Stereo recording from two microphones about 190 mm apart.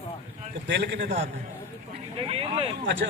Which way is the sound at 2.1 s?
30° right (ahead or behind).